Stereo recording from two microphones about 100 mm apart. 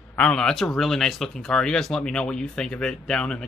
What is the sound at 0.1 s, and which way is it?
Speech, 10° left (ahead or behind).